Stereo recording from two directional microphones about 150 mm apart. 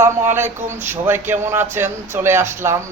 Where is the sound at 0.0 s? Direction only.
15° right (ahead or behind).